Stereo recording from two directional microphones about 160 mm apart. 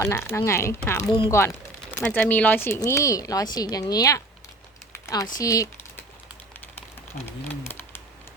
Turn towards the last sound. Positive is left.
turn(degrees=15)  # may be behind; listen again after turning